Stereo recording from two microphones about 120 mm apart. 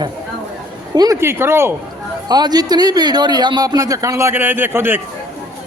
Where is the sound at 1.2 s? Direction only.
20° right (ahead or behind).